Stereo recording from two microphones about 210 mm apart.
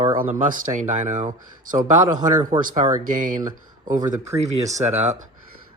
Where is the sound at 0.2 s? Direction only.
35° right (ahead or behind).